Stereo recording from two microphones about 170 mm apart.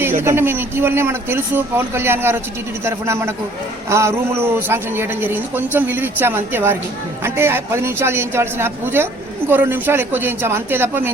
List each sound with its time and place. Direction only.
0.2 s a woman's voice: 15° right (ahead or behind)